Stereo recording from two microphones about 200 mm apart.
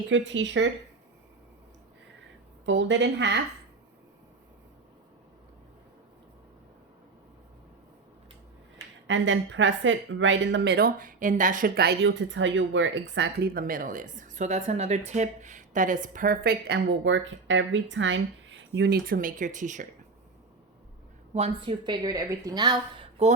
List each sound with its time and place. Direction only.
0.1 s a woman's voice: 65° right (ahead or behind)
2.6 s a woman's voice: 65° right (ahead or behind)
9.0 s speech: 70° right (ahead or behind); by 19.9 s 40° right (ahead or behind)
21.3 s a woman's voice: 25° right (ahead or behind)